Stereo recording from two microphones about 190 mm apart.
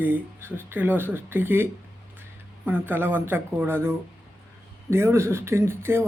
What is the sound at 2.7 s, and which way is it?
Speech, 10° right (ahead or behind).